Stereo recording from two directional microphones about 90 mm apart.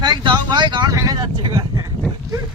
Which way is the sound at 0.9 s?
40° right (ahead or behind).